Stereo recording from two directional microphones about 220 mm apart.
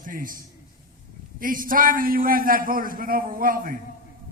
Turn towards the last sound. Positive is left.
turn(degrees=-40)  # may be behind; listen again after turning